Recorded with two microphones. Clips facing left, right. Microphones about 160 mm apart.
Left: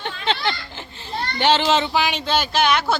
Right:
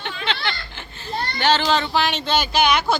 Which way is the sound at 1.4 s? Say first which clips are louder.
Left 2 dB; 25° left (ahead or behind).